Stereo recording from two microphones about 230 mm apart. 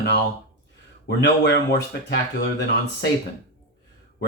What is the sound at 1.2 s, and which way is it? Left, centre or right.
Speech, left.